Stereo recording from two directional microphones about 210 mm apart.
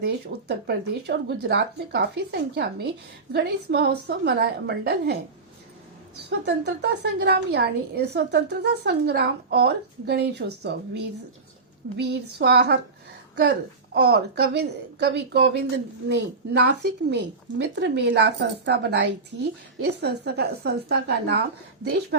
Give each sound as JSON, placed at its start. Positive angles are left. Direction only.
{"t": 0.0, "sound": "speech", "side_deg": -50}
{"t": 6.4, "sound": "speech", "side_deg": -55}
{"t": 13.9, "sound": "speech", "side_deg": -50}